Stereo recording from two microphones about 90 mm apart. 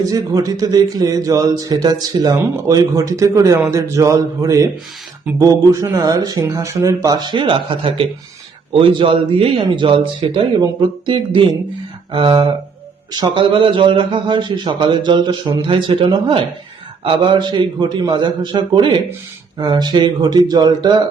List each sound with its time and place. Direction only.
0.0 s a man's voice: 40° right (ahead or behind); by 12.5 s 65° right (ahead or behind)
13.1 s a man's voice: 55° right (ahead or behind)